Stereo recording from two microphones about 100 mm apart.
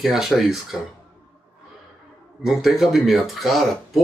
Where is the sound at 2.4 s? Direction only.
5° right (ahead or behind).